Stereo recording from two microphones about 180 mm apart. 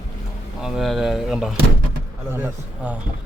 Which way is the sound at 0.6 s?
Centre (ahead or behind).